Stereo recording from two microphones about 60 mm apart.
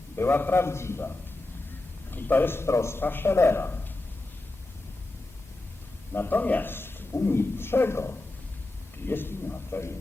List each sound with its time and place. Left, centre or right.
0.2 s a man's voice: left
2.0 s a man's voice: left
6.1 s a man's voice: left